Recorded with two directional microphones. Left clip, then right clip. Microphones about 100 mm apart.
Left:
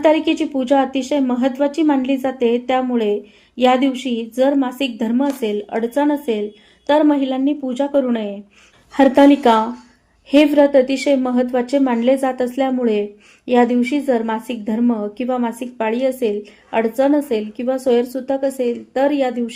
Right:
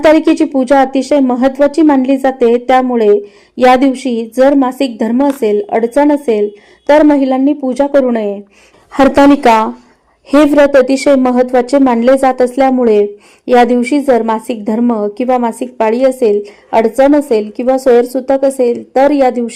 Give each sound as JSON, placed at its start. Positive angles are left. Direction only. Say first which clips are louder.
{"t": 0.0, "sound": "speech", "louder": "right 7 dB", "side_deg": -30}
{"t": 9.0, "sound": "speech", "louder": "right 5 dB", "side_deg": -40}